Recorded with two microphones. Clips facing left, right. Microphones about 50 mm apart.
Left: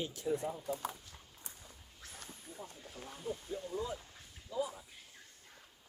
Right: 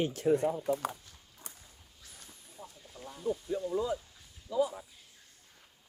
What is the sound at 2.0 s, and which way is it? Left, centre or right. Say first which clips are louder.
Dog: left 4 dB; left.